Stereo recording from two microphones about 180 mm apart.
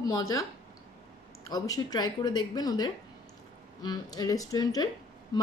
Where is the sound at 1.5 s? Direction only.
20° left (ahead or behind).